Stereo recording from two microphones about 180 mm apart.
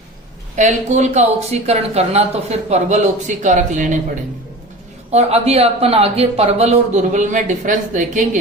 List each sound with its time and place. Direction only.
0.5 s speech: 40° right (ahead or behind)
5.1 s speech: 35° right (ahead or behind)